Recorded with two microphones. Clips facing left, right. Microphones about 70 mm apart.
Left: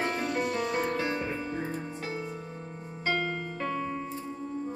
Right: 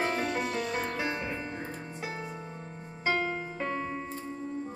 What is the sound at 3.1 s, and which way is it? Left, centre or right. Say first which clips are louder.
Music: even; centre.